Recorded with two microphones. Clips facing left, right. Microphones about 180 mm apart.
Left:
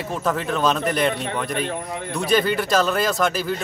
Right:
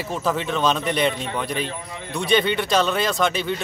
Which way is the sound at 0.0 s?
Centre (ahead or behind).